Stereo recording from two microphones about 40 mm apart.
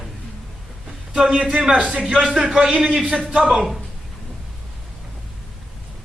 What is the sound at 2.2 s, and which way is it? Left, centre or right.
Speech, centre.